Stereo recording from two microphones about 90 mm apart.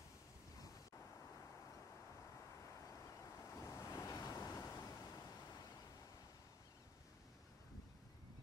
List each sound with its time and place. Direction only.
3.5 s waves: 35° left (ahead or behind)